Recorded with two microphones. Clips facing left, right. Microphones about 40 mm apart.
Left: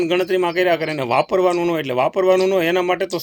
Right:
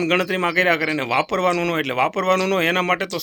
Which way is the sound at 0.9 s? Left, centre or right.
Right.